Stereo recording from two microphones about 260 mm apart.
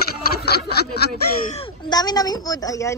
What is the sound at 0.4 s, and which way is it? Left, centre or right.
Snicker, left.